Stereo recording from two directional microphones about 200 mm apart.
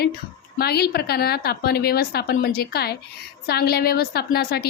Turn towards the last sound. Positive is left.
turn(degrees=50)  # may be behind; listen again after turning